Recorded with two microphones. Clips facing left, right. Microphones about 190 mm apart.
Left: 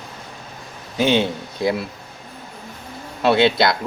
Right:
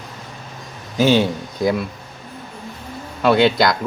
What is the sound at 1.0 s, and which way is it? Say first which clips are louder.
Speech: right 3 dB; 20° left (ahead or behind).